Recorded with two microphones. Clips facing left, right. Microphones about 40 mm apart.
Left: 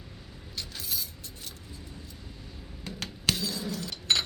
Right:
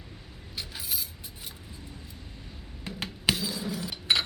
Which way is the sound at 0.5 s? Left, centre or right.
Centre.